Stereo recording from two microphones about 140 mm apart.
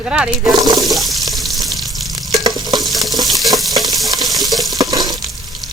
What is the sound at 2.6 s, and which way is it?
Stir, 30° right (ahead or behind).